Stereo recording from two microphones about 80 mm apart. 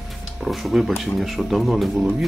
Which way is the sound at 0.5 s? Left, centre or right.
Centre.